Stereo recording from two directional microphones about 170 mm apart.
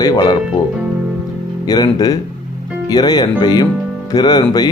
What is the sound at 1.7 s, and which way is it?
Speech, 25° left (ahead or behind).